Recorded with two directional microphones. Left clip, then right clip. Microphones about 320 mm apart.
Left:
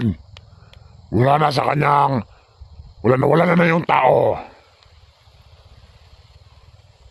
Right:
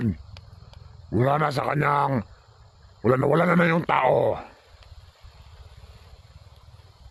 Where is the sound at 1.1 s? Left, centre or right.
Centre.